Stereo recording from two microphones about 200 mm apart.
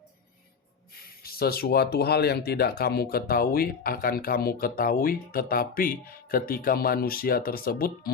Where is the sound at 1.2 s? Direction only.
50° left (ahead or behind).